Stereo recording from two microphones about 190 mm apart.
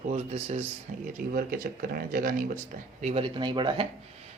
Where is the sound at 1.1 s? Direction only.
50° right (ahead or behind).